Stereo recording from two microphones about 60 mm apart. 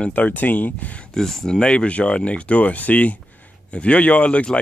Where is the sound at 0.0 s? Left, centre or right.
Left.